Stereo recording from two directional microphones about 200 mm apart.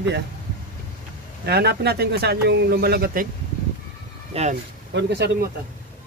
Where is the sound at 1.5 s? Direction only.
55° right (ahead or behind).